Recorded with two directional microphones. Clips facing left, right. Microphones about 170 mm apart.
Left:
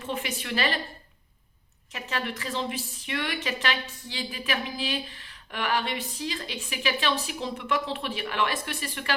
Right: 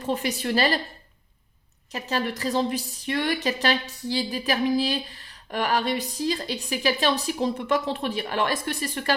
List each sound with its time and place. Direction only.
0.0 s a woman's voice: 40° right (ahead or behind)
1.9 s a woman's voice: 35° right (ahead or behind)